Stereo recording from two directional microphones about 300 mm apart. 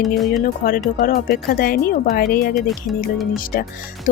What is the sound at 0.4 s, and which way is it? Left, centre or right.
Speech, left.